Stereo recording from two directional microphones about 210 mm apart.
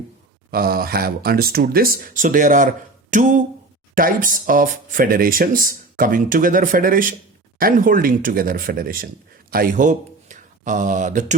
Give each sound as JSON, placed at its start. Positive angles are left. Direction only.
{"t": 0.5, "sound": "speech", "side_deg": -45}